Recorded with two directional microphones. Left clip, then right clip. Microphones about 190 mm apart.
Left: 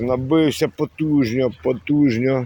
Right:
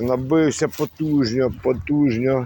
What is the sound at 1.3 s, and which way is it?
Speech, 25° left (ahead or behind).